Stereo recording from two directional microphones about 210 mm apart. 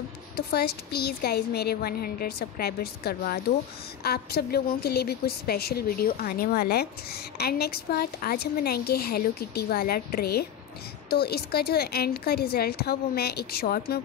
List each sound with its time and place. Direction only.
0.5 s a woman's voice: 50° left (ahead or behind)